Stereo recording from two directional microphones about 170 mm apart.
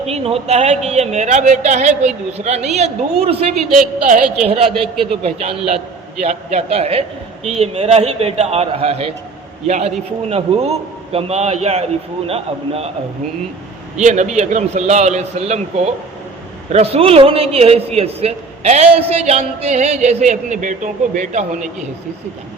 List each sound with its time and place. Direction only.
0.0 s a man's voice: 35° right (ahead or behind)
3.8 s a man's voice: 50° right (ahead or behind)
4.4 s a man's voice: 35° right (ahead or behind)
14.0 s a man's voice: 45° right (ahead or behind)